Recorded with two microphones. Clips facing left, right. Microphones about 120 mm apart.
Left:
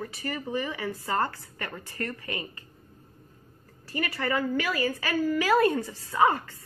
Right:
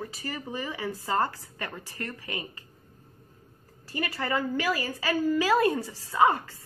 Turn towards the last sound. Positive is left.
turn(degrees=-20)  # may be behind; listen again after turning